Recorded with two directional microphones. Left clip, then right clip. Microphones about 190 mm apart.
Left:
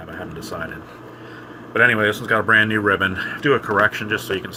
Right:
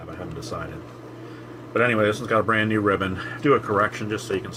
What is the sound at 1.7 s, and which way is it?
Speech, 10° left (ahead or behind).